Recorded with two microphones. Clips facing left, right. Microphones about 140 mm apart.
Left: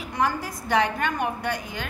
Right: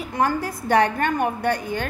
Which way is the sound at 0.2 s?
55° right (ahead or behind).